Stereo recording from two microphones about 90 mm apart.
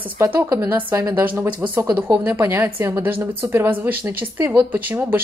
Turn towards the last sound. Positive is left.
turn(degrees=-20)  # may be behind; listen again after turning